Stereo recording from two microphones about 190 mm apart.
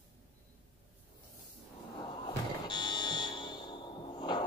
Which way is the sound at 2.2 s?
25° left (ahead or behind).